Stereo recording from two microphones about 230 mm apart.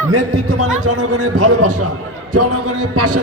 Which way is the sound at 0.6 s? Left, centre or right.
Right.